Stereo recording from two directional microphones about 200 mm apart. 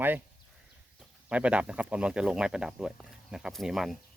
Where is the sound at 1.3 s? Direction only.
5° right (ahead or behind).